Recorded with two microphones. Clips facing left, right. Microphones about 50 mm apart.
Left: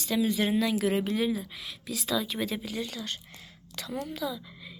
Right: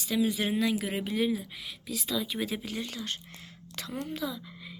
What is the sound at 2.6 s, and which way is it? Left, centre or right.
A woman's voice, right.